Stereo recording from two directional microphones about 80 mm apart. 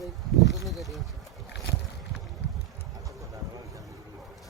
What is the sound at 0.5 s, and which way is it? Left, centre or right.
Speech, centre.